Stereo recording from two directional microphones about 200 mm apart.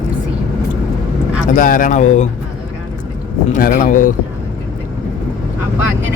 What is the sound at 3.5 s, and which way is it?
Speech, 40° left (ahead or behind).